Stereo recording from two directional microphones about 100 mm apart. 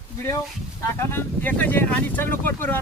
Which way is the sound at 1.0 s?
25° left (ahead or behind).